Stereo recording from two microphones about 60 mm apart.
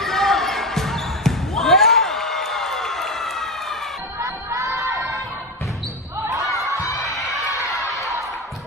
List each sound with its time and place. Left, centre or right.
0.0 s basketball bounce: centre
4.2 s a sound: right
6.8 s crowd: left